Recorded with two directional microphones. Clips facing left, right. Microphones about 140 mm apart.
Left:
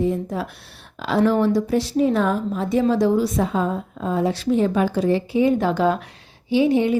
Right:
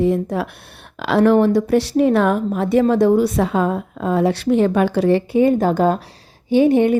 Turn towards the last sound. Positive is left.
turn(degrees=-55)  # may be behind; listen again after turning